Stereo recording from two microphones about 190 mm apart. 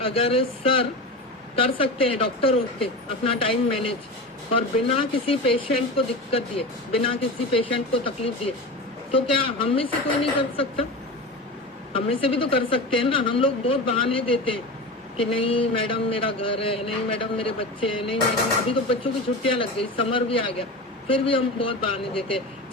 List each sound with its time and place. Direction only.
0.0 s speech: 30° left (ahead or behind)
11.9 s speech: 30° left (ahead or behind)